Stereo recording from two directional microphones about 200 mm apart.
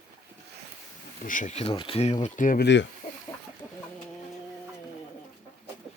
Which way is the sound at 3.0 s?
35° left (ahead or behind).